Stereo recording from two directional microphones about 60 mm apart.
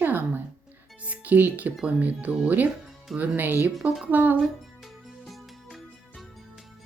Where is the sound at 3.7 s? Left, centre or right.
Centre.